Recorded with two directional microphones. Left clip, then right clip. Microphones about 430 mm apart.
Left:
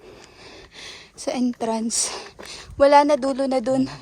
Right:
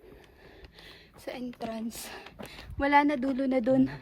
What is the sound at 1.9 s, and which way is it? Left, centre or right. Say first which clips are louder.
Speech: left 14 dB; centre.